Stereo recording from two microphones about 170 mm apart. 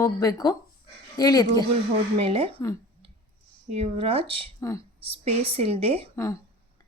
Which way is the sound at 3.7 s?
35° right (ahead or behind).